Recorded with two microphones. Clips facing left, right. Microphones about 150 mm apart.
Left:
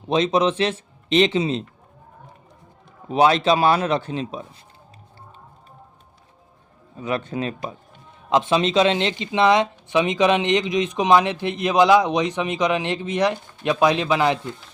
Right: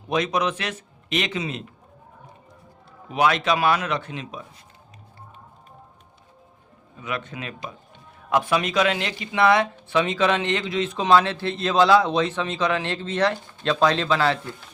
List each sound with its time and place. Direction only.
0.1 s speech: 25° left (ahead or behind)
3.1 s a man's voice: 30° left (ahead or behind)
6.9 s a man's voice: 35° left (ahead or behind)
8.3 s speech: 20° left (ahead or behind)